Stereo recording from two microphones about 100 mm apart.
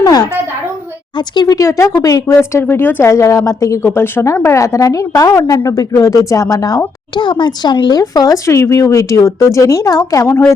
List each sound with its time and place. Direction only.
0.0 s a sound: 40° left (ahead or behind)
1.4 s speech: 35° left (ahead or behind)
3.8 s speech: 20° left (ahead or behind); by 6.8 s 40° left (ahead or behind)
7.2 s speech: 55° left (ahead or behind); by 10.4 s 30° left (ahead or behind)